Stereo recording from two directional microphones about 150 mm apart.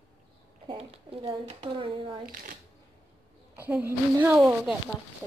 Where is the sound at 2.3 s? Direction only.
65° right (ahead or behind).